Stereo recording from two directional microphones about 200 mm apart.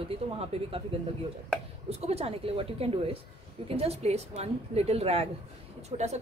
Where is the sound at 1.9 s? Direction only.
30° right (ahead or behind).